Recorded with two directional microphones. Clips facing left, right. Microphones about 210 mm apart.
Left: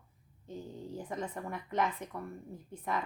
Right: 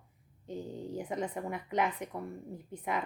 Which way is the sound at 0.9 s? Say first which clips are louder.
Right 3 dB; 15° right (ahead or behind).